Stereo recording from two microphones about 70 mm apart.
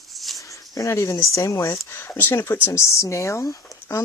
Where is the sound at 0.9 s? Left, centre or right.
Left.